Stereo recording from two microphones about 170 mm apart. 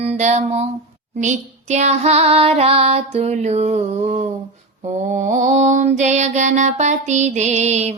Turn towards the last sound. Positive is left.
turn(degrees=-40)  # may be behind; listen again after turning